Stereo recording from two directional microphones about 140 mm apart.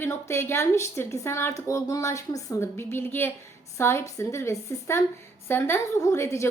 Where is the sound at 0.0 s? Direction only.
20° left (ahead or behind).